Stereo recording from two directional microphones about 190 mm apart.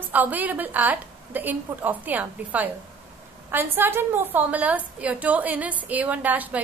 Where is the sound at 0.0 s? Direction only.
10° right (ahead or behind).